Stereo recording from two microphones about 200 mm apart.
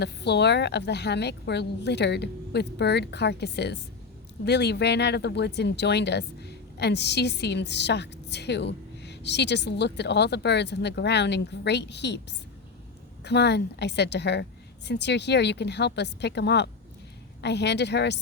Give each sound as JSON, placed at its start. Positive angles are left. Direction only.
{"t": 0.0, "sound": "speech", "side_deg": 55}
{"t": 13.2, "sound": "speech", "side_deg": 55}